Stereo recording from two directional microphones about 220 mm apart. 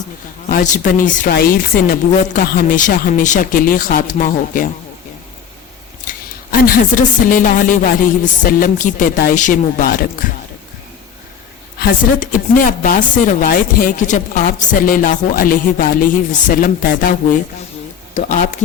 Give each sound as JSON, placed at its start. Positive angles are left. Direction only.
{"t": 0.4, "sound": "a woman's voice", "side_deg": 35}
{"t": 6.1, "sound": "a woman's voice", "side_deg": 40}
{"t": 11.8, "sound": "a woman's voice", "side_deg": 40}